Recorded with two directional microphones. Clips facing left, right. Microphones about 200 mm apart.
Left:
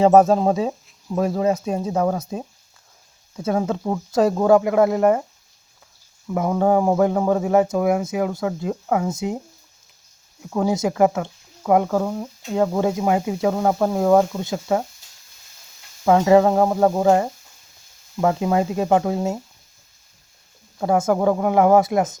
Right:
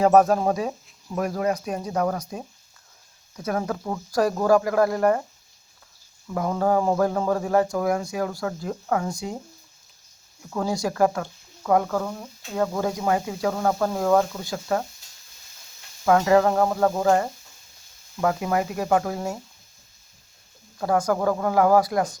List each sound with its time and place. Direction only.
0.0 s speech: 25° left (ahead or behind)
6.2 s speech: 15° left (ahead or behind)
10.4 s speech: 20° left (ahead or behind)
16.0 s speech: 20° left (ahead or behind)
20.7 s speech: 20° left (ahead or behind)